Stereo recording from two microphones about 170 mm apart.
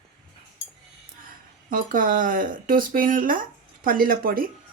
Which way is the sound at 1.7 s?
50° right (ahead or behind).